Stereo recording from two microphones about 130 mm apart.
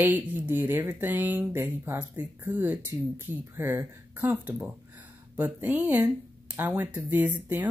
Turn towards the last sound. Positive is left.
turn(degrees=-10)  # may be behind; listen again after turning